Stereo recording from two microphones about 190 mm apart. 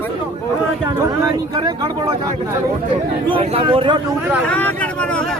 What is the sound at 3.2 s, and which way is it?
Speech, 30° right (ahead or behind).